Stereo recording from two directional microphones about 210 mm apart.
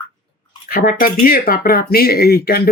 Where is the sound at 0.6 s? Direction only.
45° left (ahead or behind).